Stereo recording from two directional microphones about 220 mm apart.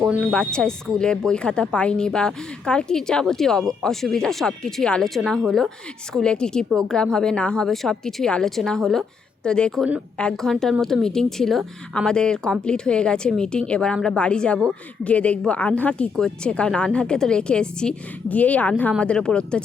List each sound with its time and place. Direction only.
0.0 s speech: 5° right (ahead or behind)